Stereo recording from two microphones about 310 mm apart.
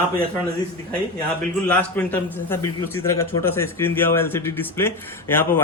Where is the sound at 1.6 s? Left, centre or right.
Centre.